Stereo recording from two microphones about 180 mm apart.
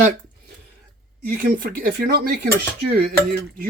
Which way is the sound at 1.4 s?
55° right (ahead or behind).